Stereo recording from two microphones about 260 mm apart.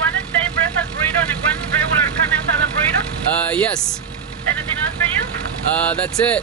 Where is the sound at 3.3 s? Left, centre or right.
Centre.